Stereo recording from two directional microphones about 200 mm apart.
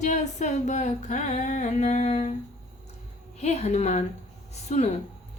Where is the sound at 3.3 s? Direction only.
35° left (ahead or behind).